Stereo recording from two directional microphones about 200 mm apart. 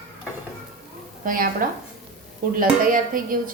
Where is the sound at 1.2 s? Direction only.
45° right (ahead or behind).